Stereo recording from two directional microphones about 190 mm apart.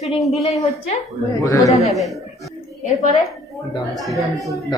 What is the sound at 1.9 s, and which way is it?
Speech, centre (ahead or behind).